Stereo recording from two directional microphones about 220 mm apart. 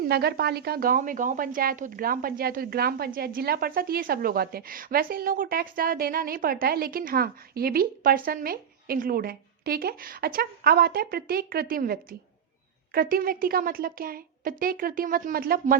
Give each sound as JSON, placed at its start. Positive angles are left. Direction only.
{"t": 0.0, "sound": "a woman's voice", "side_deg": -45}